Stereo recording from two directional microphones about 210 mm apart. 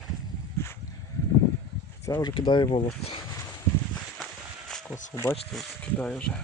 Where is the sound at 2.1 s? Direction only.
20° left (ahead or behind).